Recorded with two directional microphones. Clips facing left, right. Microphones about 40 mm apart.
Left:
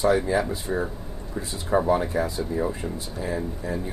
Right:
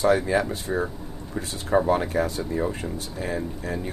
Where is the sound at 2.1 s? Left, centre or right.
Right.